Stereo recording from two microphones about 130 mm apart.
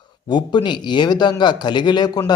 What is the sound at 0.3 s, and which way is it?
Speech, 35° left (ahead or behind).